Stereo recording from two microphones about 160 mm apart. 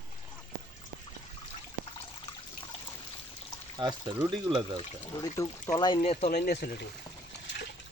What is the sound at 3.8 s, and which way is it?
Speech, 30° right (ahead or behind).